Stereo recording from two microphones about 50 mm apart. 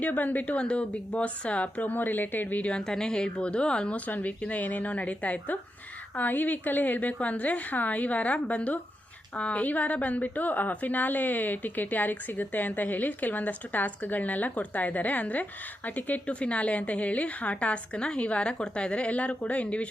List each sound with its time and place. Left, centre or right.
0.0 s a woman's voice: left
2.7 s a woman's voice: centre
4.0 s a woman's voice: left